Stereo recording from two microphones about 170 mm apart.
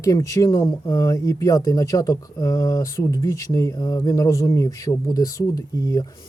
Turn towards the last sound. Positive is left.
turn(degrees=20)  # may be behind; listen again after turning